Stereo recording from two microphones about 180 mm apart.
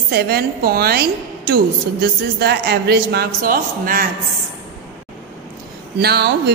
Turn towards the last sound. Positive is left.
turn(degrees=-65)  # may be behind; listen again after turning